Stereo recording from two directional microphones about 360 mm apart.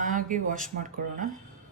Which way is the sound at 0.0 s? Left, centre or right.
Right.